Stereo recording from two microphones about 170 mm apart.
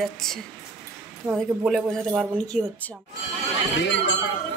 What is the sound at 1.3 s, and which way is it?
Speech, 10° right (ahead or behind).